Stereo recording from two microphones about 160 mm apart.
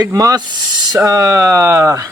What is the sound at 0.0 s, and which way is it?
Speech, 20° right (ahead or behind).